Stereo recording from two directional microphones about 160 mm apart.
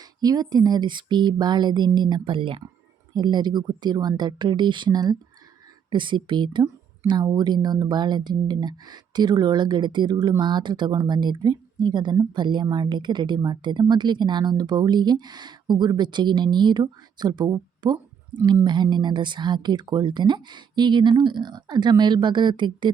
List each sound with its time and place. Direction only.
0.2 s a woman's voice: 25° right (ahead or behind)